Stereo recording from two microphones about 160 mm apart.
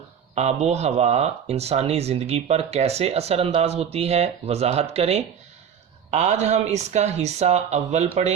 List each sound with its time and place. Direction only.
0.3 s speech: 45° right (ahead or behind)